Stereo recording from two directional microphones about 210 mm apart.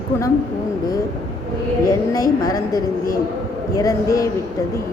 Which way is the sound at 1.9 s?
15° left (ahead or behind).